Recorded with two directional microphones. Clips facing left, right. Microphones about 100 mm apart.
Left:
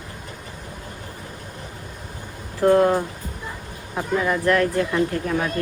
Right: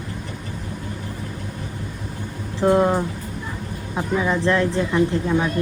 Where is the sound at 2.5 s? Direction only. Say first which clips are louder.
Left 1 dB; 15° right (ahead or behind).